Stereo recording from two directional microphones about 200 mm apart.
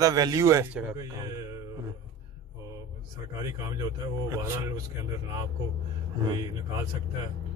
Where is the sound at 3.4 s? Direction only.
15° right (ahead or behind).